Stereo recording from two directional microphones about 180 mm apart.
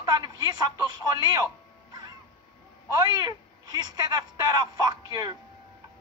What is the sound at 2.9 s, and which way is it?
A man's voice, 20° right (ahead or behind).